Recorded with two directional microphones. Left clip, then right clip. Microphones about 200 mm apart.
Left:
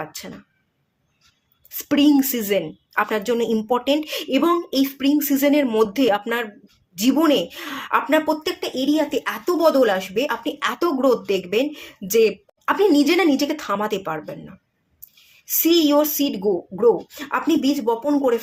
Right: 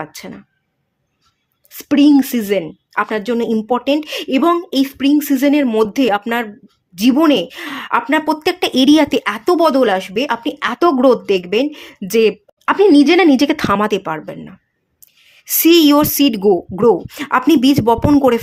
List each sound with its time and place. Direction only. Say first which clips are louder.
0.0 s a woman's voice: right 4 dB; 30° right (ahead or behind)
1.7 s a woman's voice: right 6 dB; 25° right (ahead or behind); by 18.3 s 40° right (ahead or behind)